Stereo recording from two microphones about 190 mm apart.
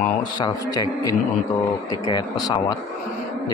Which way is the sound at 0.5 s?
20° left (ahead or behind).